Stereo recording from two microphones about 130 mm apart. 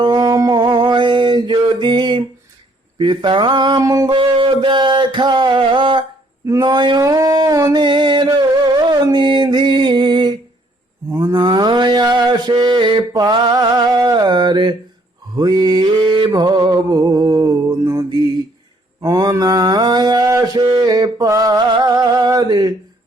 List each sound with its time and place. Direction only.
0.0 s mantra: 30° right (ahead or behind)
3.8 s music: 25° right (ahead or behind)
4.2 s music: 40° right (ahead or behind)
6.4 s speech: 30° right (ahead or behind)
7.0 s music: 25° right (ahead or behind)
11.1 s a sound: 20° right (ahead or behind)
11.3 s mantra: 35° right (ahead or behind)